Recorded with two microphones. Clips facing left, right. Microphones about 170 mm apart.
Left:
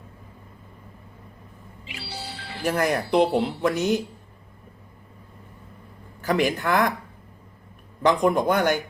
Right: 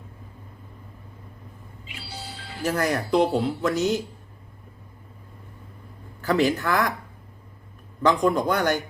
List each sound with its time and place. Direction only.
1.9 s music: 85° left
2.6 s speech: 20° left (ahead or behind)
6.2 s speech: 15° left (ahead or behind)
8.0 s speech: 20° left (ahead or behind)